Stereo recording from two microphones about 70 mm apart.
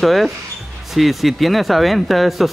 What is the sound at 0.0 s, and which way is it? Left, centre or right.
Speech, centre.